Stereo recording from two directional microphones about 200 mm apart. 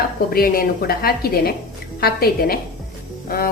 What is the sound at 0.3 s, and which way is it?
A woman's voice, 50° left (ahead or behind).